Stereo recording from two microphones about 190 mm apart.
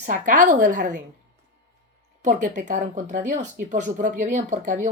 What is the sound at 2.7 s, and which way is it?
Speech, 40° right (ahead or behind).